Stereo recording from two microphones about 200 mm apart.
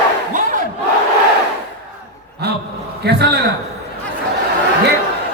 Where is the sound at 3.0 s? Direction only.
55° right (ahead or behind).